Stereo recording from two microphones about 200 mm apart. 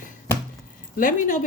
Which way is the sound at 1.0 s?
40° left (ahead or behind).